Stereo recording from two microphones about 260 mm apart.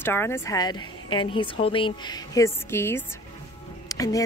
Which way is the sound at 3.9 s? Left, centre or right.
Centre.